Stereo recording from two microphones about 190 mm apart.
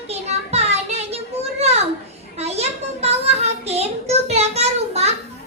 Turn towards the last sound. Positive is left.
turn(degrees=-35)  # may be behind; listen again after turning